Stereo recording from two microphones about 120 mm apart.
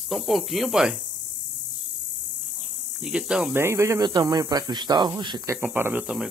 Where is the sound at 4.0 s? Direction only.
35° right (ahead or behind).